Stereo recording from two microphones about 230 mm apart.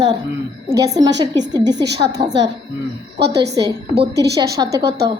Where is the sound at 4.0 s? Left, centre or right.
Right.